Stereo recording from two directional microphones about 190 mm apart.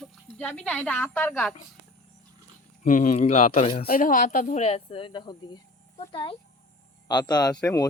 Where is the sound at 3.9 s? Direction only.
45° left (ahead or behind).